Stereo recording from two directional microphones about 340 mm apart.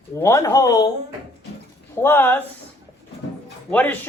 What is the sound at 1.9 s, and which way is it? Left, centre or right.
Speech, centre.